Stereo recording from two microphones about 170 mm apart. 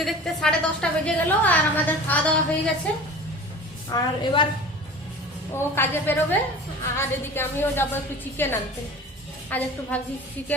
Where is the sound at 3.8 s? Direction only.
25° left (ahead or behind).